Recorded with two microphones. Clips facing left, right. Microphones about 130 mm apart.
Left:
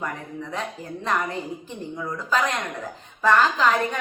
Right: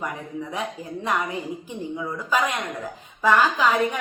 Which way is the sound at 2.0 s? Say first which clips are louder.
Even; 10° right (ahead or behind).